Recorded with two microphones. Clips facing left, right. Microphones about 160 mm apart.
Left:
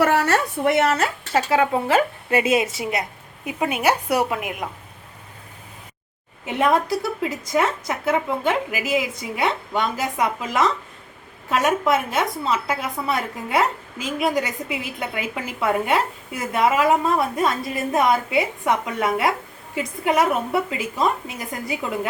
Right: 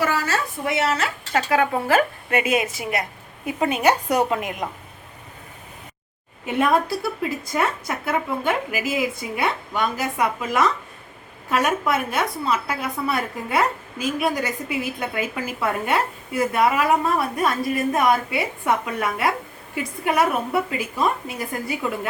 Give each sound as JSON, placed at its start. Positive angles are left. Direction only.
{"t": 0.0, "sound": "a woman's voice", "side_deg": 65}
{"t": 1.3, "sound": "a woman's voice", "side_deg": 25}
{"t": 3.4, "sound": "a woman's voice", "side_deg": 10}
{"t": 6.4, "sound": "a woman's voice", "side_deg": 20}